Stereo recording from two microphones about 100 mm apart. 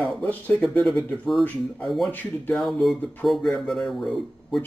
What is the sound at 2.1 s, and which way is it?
Speech, 20° left (ahead or behind).